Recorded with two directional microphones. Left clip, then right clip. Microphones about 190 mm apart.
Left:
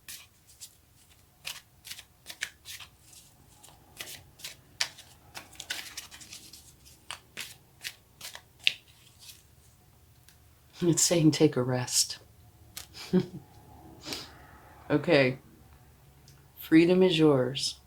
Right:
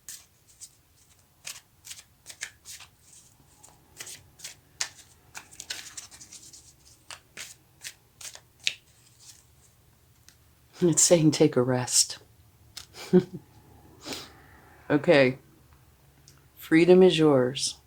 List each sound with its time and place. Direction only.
1.4 s shuffling cards: 15° right (ahead or behind)
4.8 s shuffling cards: 20° right (ahead or behind)
7.3 s shuffling cards: 15° right (ahead or behind)
10.8 s speech: 50° right (ahead or behind)
12.9 s a sound: 50° right (ahead or behind)
14.0 s sneeze: 50° right (ahead or behind)
14.8 s speech: 45° right (ahead or behind)
16.6 s speech: 50° right (ahead or behind)